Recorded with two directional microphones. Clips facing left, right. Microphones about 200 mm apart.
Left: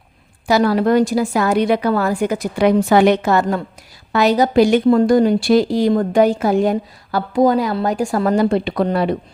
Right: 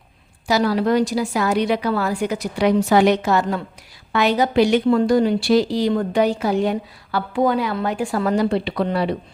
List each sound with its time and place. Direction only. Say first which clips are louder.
0.4 s a woman's voice: left 4 dB; 55° left (ahead or behind)
4.1 s a woman's voice: left 4 dB; 40° left (ahead or behind)